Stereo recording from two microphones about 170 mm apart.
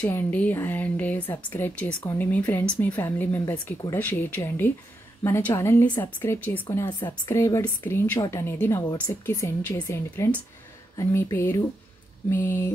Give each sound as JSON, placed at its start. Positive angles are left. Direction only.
{"t": 0.0, "sound": "speech", "side_deg": 10}